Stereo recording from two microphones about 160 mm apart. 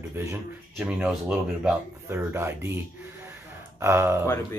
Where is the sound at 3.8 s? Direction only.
15° right (ahead or behind).